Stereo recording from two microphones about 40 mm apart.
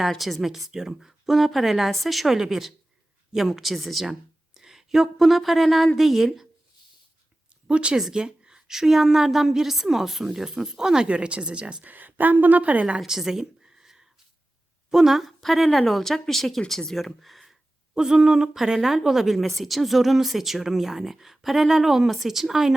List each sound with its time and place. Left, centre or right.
0.2 s speech: centre
4.1 s speech: centre
7.7 s a woman's voice: right
11.9 s a woman's voice: right
13.1 s a sound: centre
14.8 s speech: centre
17.9 s speech: centre